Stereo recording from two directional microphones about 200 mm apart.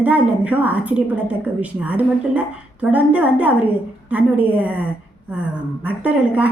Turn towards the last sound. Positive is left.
turn(degrees=-5)  # may be behind; listen again after turning